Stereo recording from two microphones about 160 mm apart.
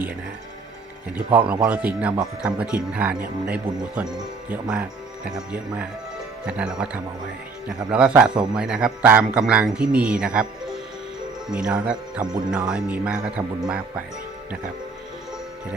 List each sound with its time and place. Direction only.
1.1 s a man's voice: 10° right (ahead or behind)